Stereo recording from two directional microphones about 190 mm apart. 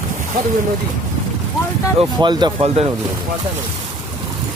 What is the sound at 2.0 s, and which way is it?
Speech, 25° right (ahead or behind).